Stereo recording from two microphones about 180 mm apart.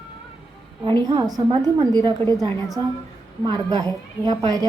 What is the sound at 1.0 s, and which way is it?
A woman's voice, 20° right (ahead or behind).